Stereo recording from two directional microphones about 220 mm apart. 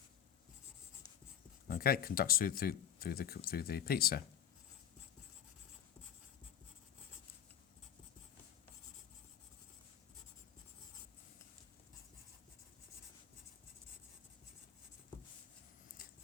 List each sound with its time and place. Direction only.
1.6 s speech: 45° left (ahead or behind)